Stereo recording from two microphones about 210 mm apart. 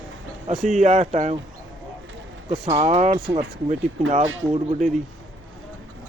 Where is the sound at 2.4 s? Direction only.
25° right (ahead or behind).